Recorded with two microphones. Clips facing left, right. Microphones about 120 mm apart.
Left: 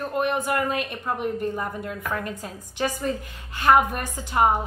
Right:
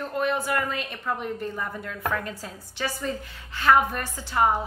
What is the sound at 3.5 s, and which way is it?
A woman's voice, 15° left (ahead or behind).